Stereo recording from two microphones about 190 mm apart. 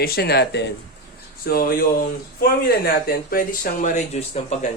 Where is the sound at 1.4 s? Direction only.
50° left (ahead or behind).